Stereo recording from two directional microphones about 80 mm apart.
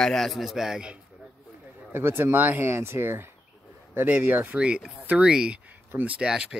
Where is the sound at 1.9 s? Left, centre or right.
Right; by 6.4 s centre.